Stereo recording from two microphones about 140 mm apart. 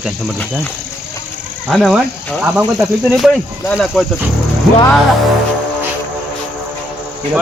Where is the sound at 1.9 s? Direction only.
10° right (ahead or behind).